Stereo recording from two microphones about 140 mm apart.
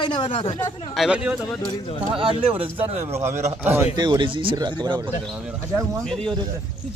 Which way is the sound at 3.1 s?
20° right (ahead or behind).